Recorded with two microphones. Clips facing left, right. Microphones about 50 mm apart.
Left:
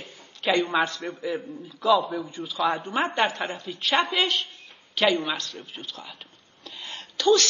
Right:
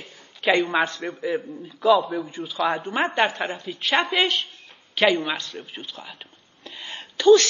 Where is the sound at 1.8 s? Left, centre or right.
Centre.